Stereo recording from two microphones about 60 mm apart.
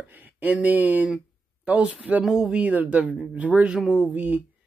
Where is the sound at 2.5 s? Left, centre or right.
Right.